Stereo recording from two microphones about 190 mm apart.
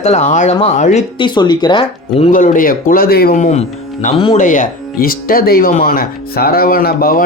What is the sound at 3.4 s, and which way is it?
Speech, 35° left (ahead or behind).